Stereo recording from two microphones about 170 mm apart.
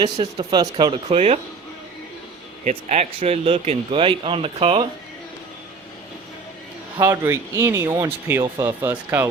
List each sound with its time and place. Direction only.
0.2 s speech: 25° right (ahead or behind)
1.0 s speech: 35° right (ahead or behind)
2.6 s speech: 40° right (ahead or behind)
7.0 s speech: 15° right (ahead or behind)